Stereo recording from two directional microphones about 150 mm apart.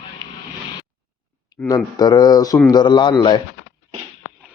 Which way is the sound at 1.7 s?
25° left (ahead or behind).